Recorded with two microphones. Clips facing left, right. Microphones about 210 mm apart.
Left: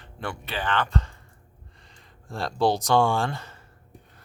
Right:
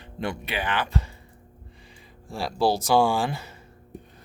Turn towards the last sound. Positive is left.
turn(degrees=-10)  # may be behind; listen again after turning